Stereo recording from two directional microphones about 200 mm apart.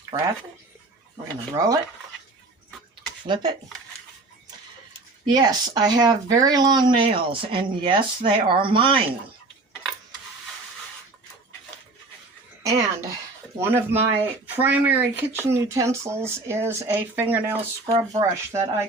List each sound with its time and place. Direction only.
0.1 s speech: 30° right (ahead or behind)
1.5 s speech: 15° right (ahead or behind)
3.2 s speech: 25° right (ahead or behind)
5.2 s speech: 20° right (ahead or behind)
12.6 s a sound: 15° right (ahead or behind)
13.6 s speech: 10° right (ahead or behind)
17.8 s speech: 25° right (ahead or behind)